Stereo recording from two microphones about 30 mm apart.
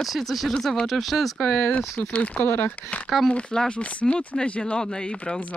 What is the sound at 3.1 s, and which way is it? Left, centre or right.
Speech, centre.